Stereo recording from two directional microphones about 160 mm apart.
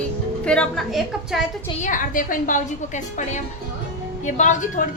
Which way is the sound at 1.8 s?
55° left (ahead or behind).